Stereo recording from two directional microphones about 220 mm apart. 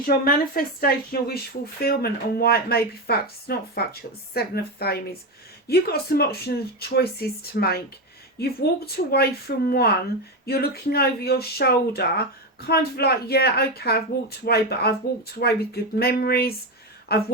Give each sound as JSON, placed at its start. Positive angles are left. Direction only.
{"t": 0.0, "sound": "speech", "side_deg": 40}
{"t": 9.0, "sound": "speech", "side_deg": 45}